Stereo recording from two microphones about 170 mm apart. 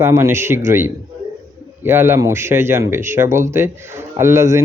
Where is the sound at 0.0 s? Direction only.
15° right (ahead or behind).